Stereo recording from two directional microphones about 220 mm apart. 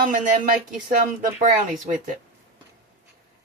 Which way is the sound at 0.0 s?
35° right (ahead or behind).